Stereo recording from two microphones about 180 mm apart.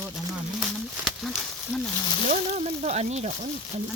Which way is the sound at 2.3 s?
40° right (ahead or behind).